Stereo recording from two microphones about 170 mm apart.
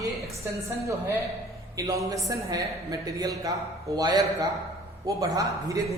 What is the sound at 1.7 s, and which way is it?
A woman's voice, 20° right (ahead or behind).